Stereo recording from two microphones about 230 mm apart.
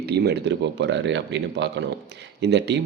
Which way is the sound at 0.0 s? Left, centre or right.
Right.